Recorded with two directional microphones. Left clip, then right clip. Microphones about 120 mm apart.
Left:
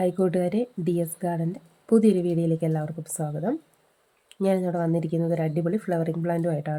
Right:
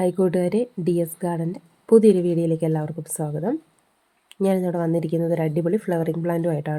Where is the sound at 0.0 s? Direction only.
25° right (ahead or behind).